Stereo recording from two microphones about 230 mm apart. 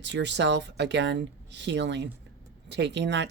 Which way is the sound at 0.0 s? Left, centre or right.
Right.